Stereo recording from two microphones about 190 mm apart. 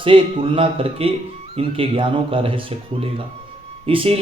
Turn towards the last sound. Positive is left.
turn(degrees=-30)  # may be behind; listen again after turning